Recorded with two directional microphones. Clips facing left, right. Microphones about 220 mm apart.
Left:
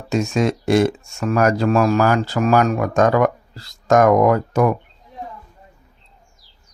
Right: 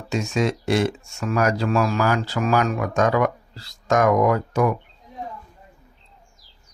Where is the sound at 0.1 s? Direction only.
45° left (ahead or behind).